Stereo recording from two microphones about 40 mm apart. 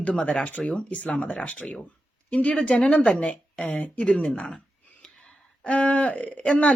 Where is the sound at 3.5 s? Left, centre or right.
Centre.